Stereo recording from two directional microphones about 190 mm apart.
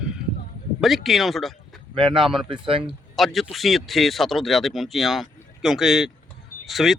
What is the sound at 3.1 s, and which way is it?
Speech, centre (ahead or behind).